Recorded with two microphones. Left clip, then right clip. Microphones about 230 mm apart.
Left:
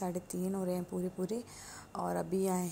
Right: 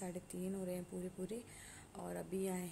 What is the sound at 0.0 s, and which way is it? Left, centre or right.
A woman's voice, centre.